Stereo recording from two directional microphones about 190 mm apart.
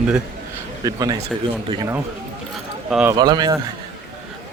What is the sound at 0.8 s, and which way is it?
Speech, 20° right (ahead or behind).